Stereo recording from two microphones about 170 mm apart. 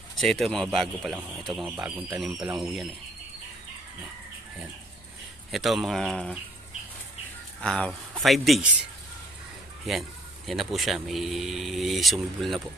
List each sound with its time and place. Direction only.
0.2 s speech: centre (ahead or behind)
5.5 s speech: centre (ahead or behind)
7.6 s speech: 5° left (ahead or behind)
9.9 s speech: centre (ahead or behind)